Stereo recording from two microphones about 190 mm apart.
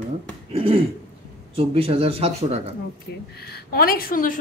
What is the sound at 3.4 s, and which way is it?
A woman's voice, 55° left (ahead or behind).